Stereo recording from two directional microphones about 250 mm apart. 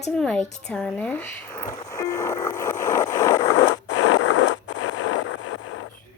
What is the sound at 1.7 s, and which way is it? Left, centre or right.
Music, centre.